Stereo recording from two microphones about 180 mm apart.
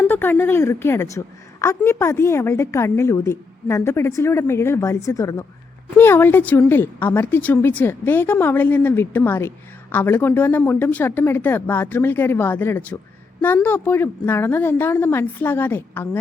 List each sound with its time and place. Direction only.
0.0 s a woman's voice: 10° left (ahead or behind)